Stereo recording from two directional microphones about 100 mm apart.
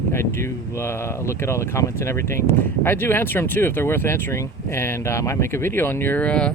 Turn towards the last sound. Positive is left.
turn(degrees=10)  # may be behind; listen again after turning